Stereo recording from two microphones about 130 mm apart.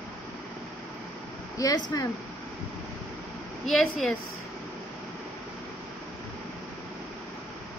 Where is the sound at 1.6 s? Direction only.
25° left (ahead or behind).